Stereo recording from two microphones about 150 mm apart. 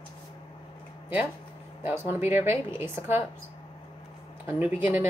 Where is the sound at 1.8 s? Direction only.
15° right (ahead or behind).